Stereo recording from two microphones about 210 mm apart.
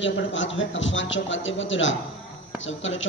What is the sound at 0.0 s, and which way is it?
A woman's voice, 65° left (ahead or behind).